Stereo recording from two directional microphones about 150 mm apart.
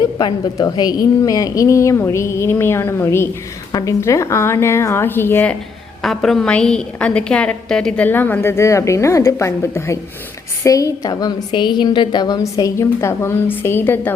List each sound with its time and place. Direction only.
0.0 s a woman's voice: 30° left (ahead or behind); by 5.5 s 10° left (ahead or behind)
6.0 s a woman's voice: centre (ahead or behind)